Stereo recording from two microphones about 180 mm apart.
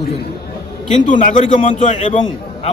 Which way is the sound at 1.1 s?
45° left (ahead or behind).